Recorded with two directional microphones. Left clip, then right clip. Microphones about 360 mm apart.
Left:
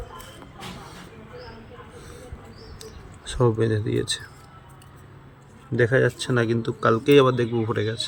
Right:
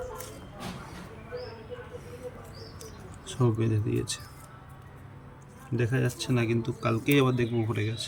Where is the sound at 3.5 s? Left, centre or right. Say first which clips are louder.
Left 7 dB; left.